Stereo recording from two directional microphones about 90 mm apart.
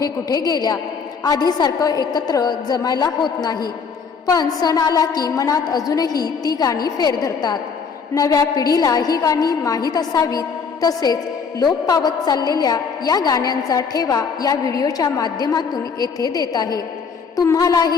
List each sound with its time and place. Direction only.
0.0 s a woman's voice: 45° left (ahead or behind)